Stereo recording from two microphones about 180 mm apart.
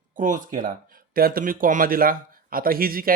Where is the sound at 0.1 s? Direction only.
45° right (ahead or behind).